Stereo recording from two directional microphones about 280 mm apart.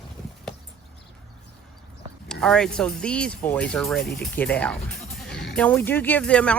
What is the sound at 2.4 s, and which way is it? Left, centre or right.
Speech, centre.